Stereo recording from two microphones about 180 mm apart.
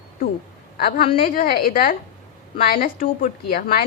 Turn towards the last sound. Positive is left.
turn(degrees=55)  # may be behind; listen again after turning